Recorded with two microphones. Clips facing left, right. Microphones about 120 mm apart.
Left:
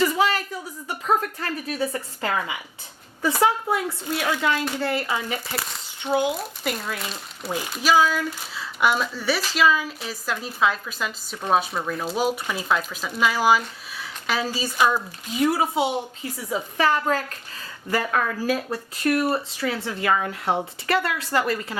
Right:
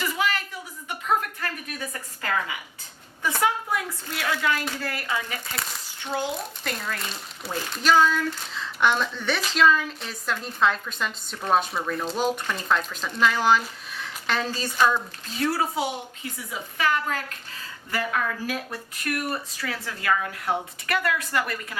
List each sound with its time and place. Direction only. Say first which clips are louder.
0.0 s a sound: left 6 dB; 35° left (ahead or behind)
0.9 s a woman's voice: left 2 dB; 35° left (ahead or behind)
6.1 s speech: left 6 dB; 5° left (ahead or behind)
16.5 s a woman's voice: left 4 dB; 35° left (ahead or behind)